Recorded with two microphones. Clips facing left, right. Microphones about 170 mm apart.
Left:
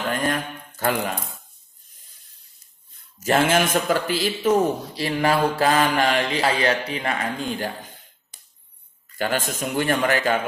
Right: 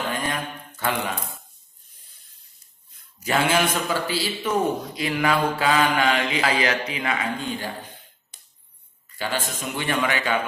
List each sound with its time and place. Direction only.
0.3 s mantra: 45° left (ahead or behind)
3.2 s a man's voice: 45° left (ahead or behind)
9.2 s a man's voice: 50° left (ahead or behind)